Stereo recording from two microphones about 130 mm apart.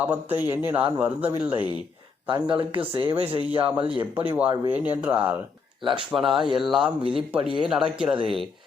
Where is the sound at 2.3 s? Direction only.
40° right (ahead or behind).